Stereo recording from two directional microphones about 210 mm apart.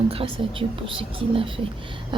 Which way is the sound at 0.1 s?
25° right (ahead or behind).